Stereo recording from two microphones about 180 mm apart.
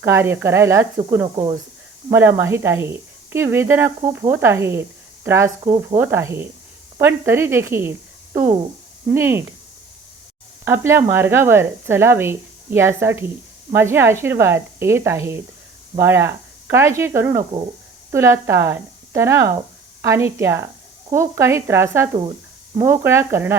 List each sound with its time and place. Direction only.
0.0 s a woman's voice: 15° right (ahead or behind)
10.7 s a woman's voice: 15° right (ahead or behind)